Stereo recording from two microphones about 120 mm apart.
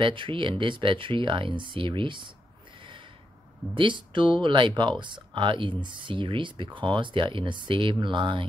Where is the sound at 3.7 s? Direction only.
45° right (ahead or behind).